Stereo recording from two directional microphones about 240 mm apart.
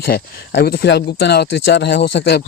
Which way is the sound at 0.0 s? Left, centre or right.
Left.